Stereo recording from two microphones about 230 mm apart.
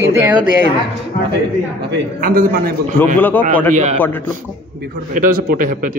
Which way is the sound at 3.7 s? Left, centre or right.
Right.